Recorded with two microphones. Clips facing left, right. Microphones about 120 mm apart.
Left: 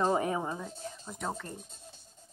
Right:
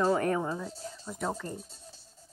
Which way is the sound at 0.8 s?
20° left (ahead or behind).